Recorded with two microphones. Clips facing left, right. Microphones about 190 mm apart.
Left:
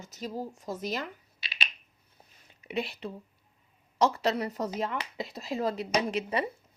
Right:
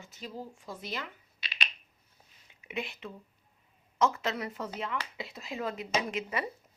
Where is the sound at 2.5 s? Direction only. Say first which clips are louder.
Left 5 dB; 35° left (ahead or behind).